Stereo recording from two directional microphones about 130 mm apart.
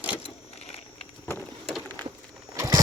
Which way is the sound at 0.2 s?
50° left (ahead or behind).